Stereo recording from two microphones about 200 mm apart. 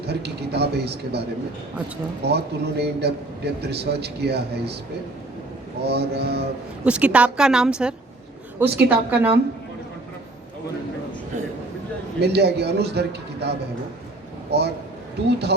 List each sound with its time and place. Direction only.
0.1 s a man's voice: 55° right (ahead or behind)
2.2 s a man's voice: 55° right (ahead or behind)
5.8 s a man's voice: 55° right (ahead or behind)
6.8 s a woman's voice: 5° right (ahead or behind)
12.2 s a man's voice: 55° right (ahead or behind)
14.5 s a man's voice: 55° right (ahead or behind)